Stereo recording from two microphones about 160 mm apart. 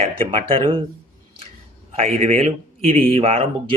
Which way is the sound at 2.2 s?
45° right (ahead or behind).